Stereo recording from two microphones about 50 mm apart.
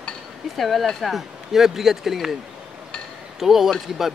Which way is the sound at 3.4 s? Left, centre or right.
Centre.